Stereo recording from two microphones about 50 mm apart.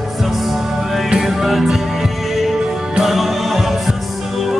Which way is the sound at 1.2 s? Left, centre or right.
Centre.